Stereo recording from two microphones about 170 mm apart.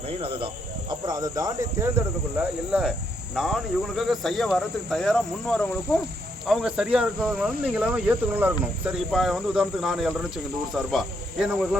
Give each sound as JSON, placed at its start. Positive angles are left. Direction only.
{"t": 0.1, "sound": "speech", "side_deg": -30}